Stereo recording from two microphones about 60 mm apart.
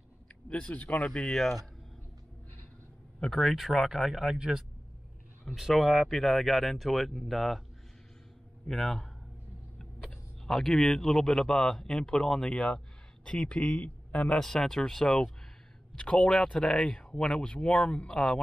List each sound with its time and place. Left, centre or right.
0.5 s speech: left
0.9 s speech: centre
1.3 s speech: centre
3.2 s speech: centre
8.6 s speech: centre
10.4 s a man's voice: centre; by 14.3 s left
14.3 s speech: centre
16.0 s speech: centre